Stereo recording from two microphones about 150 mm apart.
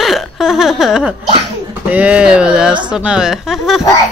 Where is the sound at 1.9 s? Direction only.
10° right (ahead or behind).